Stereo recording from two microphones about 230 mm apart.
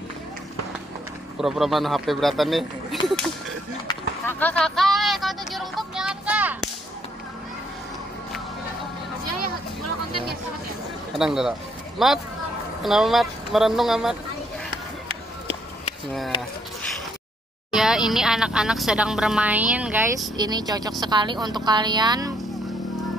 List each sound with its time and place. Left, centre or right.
1.4 s speech: centre
4.4 s a sound: centre
11.1 s speech: centre
17.7 s speech: centre
20.3 s a woman's voice: centre